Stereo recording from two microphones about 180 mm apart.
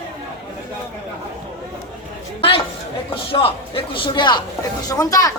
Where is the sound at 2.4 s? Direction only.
30° left (ahead or behind).